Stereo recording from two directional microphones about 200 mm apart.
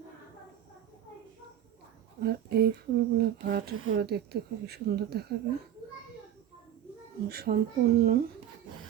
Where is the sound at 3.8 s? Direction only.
65° right (ahead or behind).